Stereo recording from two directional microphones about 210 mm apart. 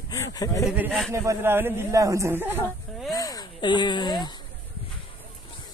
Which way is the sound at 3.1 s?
20° left (ahead or behind).